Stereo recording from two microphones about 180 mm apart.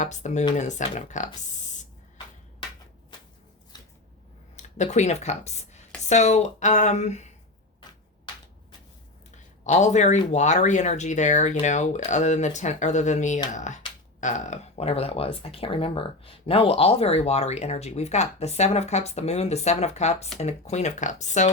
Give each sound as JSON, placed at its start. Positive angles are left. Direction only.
{"t": 0.0, "sound": "speech", "side_deg": 40}
{"t": 3.7, "sound": "a sound", "side_deg": 20}
{"t": 4.5, "sound": "speech", "side_deg": 40}
{"t": 9.6, "sound": "speech", "side_deg": 40}